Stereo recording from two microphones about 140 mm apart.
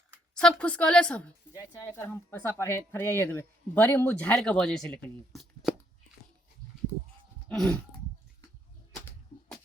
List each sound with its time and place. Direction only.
0.3 s speech: 5° left (ahead or behind)
1.5 s speech: 20° left (ahead or behind); by 5.7 s centre (ahead or behind)
7.4 s a sound: centre (ahead or behind)